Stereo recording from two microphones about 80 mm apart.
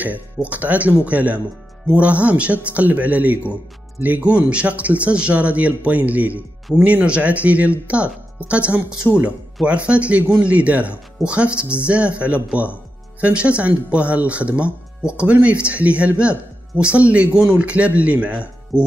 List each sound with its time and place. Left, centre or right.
0.0 s speech: centre
18.7 s speech: left